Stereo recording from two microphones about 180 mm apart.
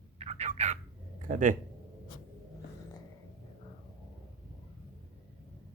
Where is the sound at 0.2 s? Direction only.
35° right (ahead or behind).